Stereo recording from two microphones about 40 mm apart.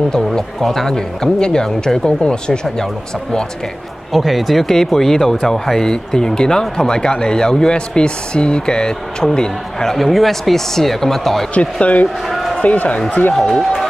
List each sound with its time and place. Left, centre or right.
0.2 s speech: centre
0.9 s speech: centre
4.1 s speech: centre
9.8 s speech: centre
11.5 s speech: left
12.3 s a sound: centre
12.6 s speech: left
13.3 s speech: centre